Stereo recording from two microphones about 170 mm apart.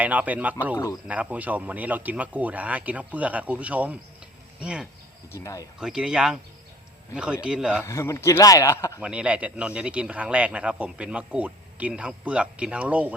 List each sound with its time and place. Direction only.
0.0 s speech: 10° right (ahead or behind)
5.3 s speech: 20° left (ahead or behind)
5.8 s speech: 5° right (ahead or behind)
7.9 s a man's voice: 15° left (ahead or behind)
9.0 s speech: 5° right (ahead or behind)